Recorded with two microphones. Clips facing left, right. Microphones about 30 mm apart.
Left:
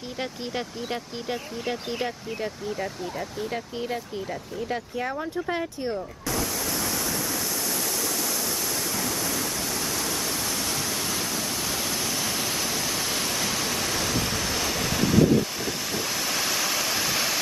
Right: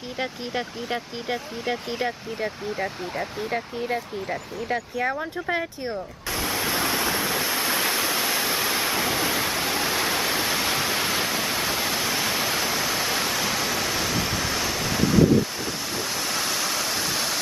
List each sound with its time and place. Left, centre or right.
0.2 s speech: centre
2.8 s speech: right
6.4 s waterfall: right; by 15.2 s centre
16.3 s waterfall: centre